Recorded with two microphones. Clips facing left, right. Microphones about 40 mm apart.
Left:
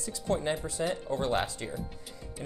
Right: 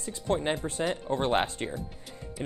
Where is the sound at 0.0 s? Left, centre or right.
Right.